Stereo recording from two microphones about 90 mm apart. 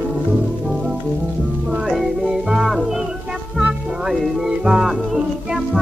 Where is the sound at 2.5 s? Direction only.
5° right (ahead or behind).